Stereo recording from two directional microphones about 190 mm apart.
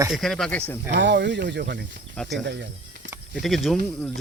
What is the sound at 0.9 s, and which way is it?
Speech, 65° right (ahead or behind).